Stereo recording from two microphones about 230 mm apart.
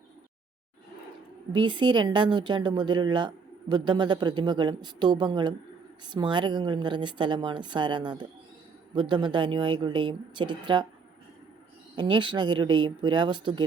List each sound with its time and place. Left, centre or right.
1.5 s speech: centre
11.9 s speech: right